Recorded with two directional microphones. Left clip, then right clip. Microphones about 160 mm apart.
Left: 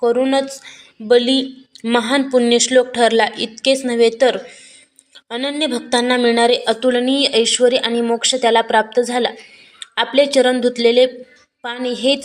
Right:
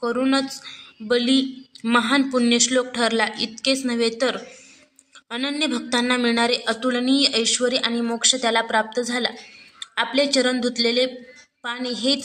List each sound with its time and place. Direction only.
0.0 s speech: 10° left (ahead or behind)
5.3 s speech: 10° left (ahead or behind)